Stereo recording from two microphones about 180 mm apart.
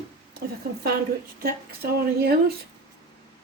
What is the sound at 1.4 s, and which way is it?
Speech, 60° right (ahead or behind).